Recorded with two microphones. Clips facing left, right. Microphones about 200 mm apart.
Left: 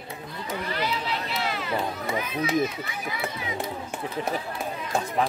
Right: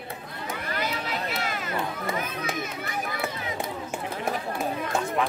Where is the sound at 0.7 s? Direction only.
50° right (ahead or behind).